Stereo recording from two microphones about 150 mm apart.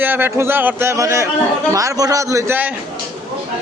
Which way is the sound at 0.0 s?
15° right (ahead or behind).